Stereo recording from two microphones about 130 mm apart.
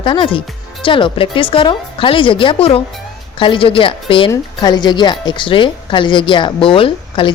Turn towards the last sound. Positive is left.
turn(degrees=40)  # may be behind; listen again after turning